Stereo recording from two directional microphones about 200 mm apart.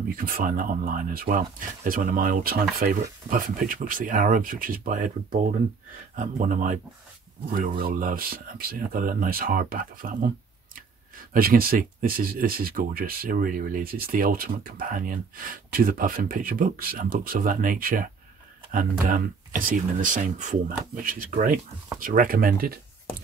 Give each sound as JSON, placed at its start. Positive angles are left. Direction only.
{"t": 0.1, "sound": "speech", "side_deg": -45}
{"t": 7.8, "sound": "speech", "side_deg": -45}
{"t": 11.3, "sound": "speech", "side_deg": -45}